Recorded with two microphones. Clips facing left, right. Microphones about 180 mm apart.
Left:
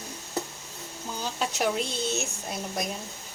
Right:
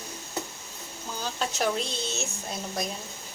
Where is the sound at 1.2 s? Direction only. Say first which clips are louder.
Even; 15° left (ahead or behind).